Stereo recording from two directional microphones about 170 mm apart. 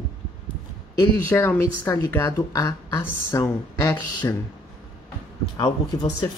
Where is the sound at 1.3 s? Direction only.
15° left (ahead or behind).